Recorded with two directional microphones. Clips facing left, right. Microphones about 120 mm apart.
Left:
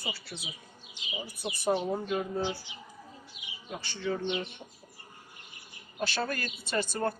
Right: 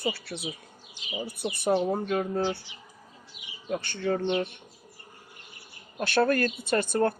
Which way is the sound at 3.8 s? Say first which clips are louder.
Right 3 dB; 55° right (ahead or behind).